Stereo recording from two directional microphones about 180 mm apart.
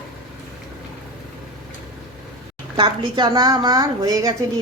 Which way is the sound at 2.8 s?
25° right (ahead or behind).